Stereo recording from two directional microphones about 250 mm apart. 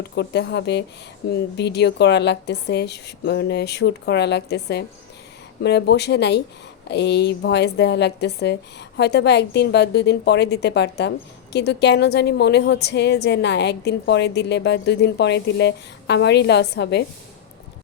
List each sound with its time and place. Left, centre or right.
0.2 s a woman's voice: left